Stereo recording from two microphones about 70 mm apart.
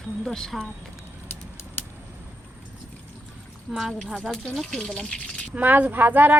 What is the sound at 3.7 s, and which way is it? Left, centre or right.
Speech, centre.